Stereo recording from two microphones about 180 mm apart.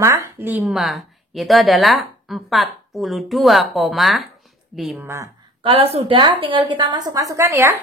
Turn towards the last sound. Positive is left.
turn(degrees=-15)  # may be behind; listen again after turning